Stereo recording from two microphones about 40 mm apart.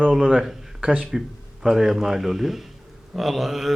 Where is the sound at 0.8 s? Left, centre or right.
Right.